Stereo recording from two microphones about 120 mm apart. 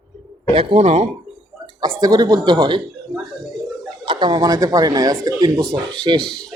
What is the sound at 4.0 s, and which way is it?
Speech, 40° right (ahead or behind).